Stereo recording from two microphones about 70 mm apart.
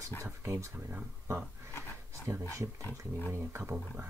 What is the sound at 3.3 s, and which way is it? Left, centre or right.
Speech, right.